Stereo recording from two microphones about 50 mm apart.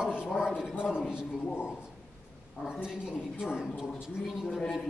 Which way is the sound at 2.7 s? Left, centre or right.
Centre.